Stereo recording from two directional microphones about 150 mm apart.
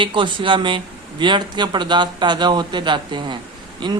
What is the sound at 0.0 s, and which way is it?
Speech, 35° right (ahead or behind).